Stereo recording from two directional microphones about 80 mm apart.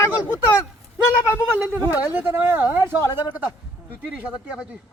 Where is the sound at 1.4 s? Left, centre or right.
Centre.